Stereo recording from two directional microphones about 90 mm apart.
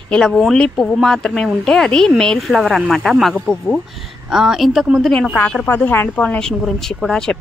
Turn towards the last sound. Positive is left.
turn(degrees=5)  # may be behind; listen again after turning